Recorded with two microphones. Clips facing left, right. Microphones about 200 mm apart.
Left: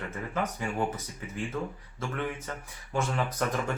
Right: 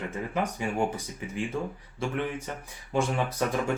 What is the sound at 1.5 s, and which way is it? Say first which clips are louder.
Speech: right 1 dB; 25° right (ahead or behind).